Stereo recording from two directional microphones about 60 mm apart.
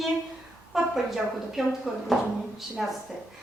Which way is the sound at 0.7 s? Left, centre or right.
Centre.